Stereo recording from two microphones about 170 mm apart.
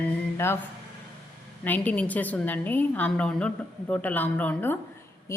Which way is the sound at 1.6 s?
10° left (ahead or behind).